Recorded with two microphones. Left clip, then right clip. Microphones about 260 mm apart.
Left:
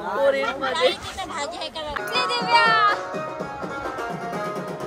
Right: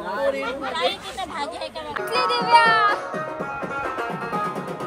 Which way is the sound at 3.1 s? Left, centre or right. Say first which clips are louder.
Right 1 dB; right.